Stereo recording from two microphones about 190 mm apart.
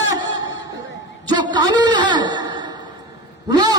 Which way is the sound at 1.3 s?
20° right (ahead or behind).